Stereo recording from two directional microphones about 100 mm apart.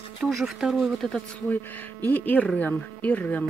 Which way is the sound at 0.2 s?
Centre (ahead or behind).